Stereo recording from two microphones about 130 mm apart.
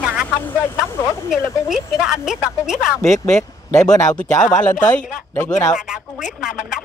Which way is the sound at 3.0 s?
25° left (ahead or behind).